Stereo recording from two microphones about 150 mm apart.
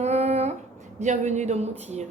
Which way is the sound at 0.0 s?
45° right (ahead or behind).